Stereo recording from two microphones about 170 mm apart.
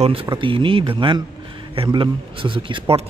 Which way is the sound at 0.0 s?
35° right (ahead or behind).